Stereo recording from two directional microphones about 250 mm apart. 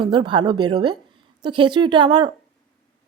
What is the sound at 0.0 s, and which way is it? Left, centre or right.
A woman's voice, centre.